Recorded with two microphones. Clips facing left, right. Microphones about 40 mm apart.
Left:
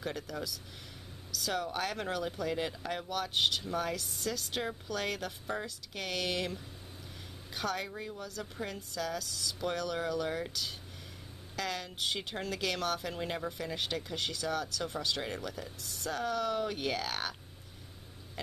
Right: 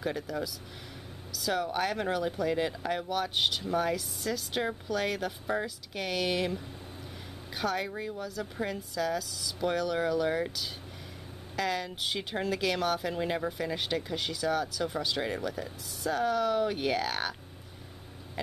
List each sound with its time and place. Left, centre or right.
0.0 s speech: centre